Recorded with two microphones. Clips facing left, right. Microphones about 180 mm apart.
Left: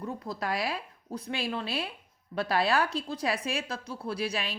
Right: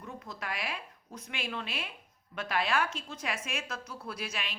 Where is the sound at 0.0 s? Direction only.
35° left (ahead or behind).